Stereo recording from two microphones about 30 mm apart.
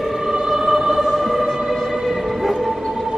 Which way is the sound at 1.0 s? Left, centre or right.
Centre.